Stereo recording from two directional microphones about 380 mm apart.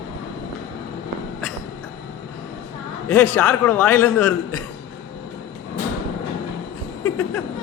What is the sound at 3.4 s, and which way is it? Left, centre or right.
A man's voice, centre.